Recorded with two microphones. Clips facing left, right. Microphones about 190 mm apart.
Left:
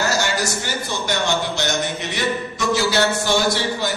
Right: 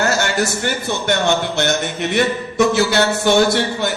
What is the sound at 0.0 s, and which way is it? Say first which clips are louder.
A man's voice: right 3 dB; 60° right (ahead or behind).